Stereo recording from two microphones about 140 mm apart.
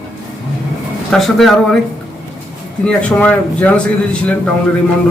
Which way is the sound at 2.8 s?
10° left (ahead or behind).